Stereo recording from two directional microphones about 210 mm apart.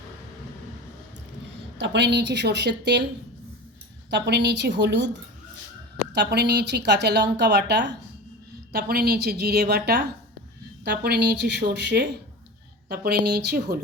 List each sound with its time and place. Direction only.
1.8 s a woman's voice: 55° right (ahead or behind)
4.1 s a woman's voice: 55° right (ahead or behind)